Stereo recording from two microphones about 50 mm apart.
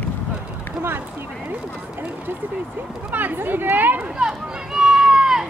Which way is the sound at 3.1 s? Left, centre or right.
Right.